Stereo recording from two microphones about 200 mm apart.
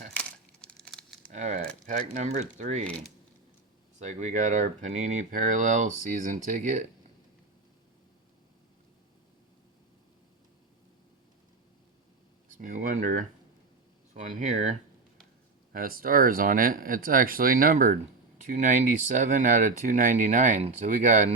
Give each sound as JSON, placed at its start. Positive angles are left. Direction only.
{"t": 0.2, "sound": "a sound", "side_deg": 5}
{"t": 1.3, "sound": "speech", "side_deg": -35}
{"t": 4.0, "sound": "speech", "side_deg": -35}
{"t": 12.5, "sound": "speech", "side_deg": -40}
{"t": 15.7, "sound": "speech", "side_deg": -45}